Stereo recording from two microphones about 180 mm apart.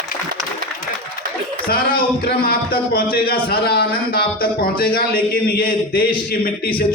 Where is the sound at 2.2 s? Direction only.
55° left (ahead or behind).